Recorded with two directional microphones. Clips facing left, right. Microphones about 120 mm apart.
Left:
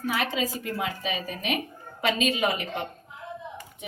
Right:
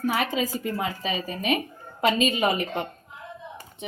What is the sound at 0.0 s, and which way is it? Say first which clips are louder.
Speech: right 3 dB; 45° right (ahead or behind).